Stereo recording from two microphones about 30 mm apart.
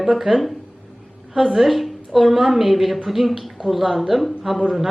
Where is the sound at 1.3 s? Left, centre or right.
Right.